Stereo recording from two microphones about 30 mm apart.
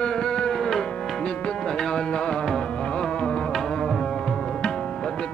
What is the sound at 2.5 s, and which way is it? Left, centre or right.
Carnatic music, left.